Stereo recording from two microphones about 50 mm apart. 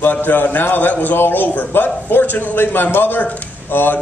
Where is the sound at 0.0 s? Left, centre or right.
Left.